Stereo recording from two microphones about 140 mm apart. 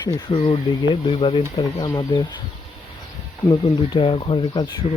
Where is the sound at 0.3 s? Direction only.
40° left (ahead or behind).